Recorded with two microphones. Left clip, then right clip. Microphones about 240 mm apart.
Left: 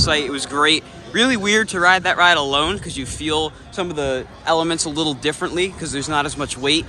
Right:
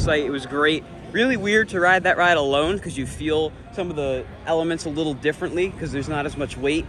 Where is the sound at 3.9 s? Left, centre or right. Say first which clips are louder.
Left 3 dB; left.